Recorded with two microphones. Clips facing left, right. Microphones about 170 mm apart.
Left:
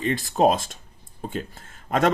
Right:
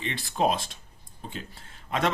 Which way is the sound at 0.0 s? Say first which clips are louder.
Left 7 dB; 45° left (ahead or behind).